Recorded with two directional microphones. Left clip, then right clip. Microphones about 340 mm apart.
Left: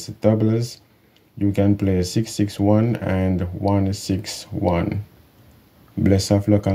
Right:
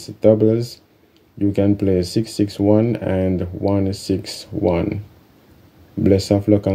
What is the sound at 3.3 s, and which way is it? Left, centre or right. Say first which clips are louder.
Speech: right 2 dB; left.